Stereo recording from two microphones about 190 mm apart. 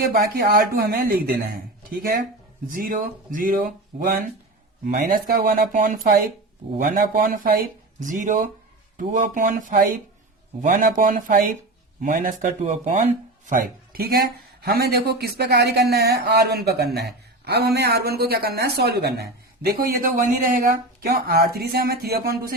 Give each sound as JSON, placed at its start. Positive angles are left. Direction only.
{"t": 0.1, "sound": "speech", "side_deg": -55}
{"t": 4.9, "sound": "speech", "side_deg": -50}